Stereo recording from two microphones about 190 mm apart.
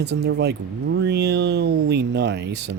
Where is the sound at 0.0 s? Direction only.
60° right (ahead or behind).